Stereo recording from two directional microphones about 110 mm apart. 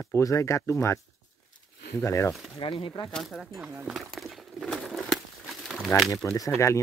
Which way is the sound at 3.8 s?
Centre (ahead or behind).